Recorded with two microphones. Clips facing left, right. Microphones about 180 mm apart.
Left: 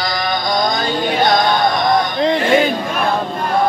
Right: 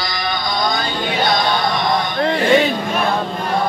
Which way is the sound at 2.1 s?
20° left (ahead or behind).